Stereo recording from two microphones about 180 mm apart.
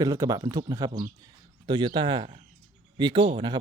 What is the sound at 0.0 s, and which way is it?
A man's voice, 20° right (ahead or behind).